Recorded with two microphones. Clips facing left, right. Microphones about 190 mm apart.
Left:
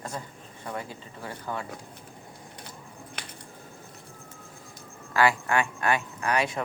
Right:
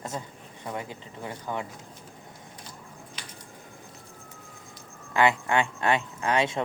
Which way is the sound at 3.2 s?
55° left (ahead or behind).